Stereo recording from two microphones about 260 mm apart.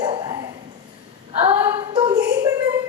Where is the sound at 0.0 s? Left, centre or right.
Centre.